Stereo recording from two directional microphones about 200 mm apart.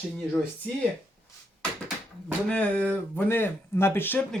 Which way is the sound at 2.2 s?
5° left (ahead or behind).